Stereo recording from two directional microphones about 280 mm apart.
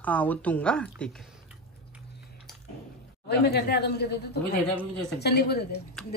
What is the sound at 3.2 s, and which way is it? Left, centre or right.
Speech, left.